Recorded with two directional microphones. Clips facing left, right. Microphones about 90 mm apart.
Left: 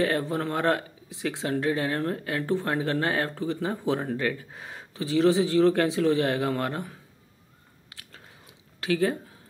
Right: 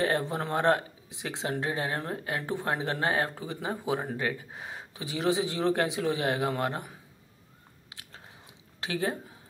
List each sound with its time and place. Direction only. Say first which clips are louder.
0.0 s speech: left 3 dB; 20° right (ahead or behind)
7.9 s biting: even; 20° right (ahead or behind)
8.8 s speech: left 6 dB; 20° right (ahead or behind)